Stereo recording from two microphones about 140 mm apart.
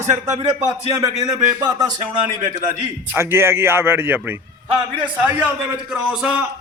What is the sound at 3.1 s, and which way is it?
A man's voice, 15° right (ahead or behind).